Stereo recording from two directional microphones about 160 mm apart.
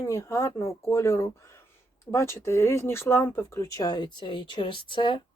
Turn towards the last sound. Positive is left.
turn(degrees=30)  # may be behind; listen again after turning